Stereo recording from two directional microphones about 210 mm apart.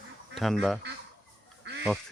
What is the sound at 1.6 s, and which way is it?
Goose, 55° right (ahead or behind).